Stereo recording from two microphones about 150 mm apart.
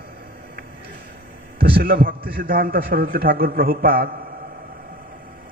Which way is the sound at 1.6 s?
85° right.